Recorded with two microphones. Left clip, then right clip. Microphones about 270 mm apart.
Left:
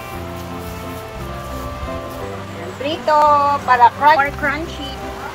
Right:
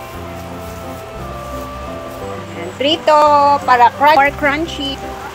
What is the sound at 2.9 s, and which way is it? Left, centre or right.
Speech, right.